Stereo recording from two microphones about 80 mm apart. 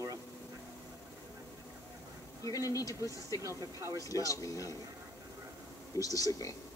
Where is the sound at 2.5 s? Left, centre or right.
Left.